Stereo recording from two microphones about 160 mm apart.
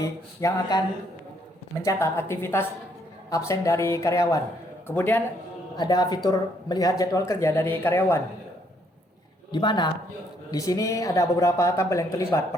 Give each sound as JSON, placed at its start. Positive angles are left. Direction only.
{"t": 0.0, "sound": "speech", "side_deg": 20}
{"t": 1.8, "sound": "speech", "side_deg": 20}
{"t": 5.7, "sound": "speech", "side_deg": 25}
{"t": 9.5, "sound": "speech", "side_deg": 30}